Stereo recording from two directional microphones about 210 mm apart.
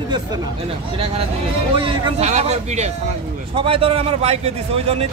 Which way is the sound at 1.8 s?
30° right (ahead or behind).